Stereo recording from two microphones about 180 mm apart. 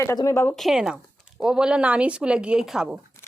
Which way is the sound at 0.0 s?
15° left (ahead or behind).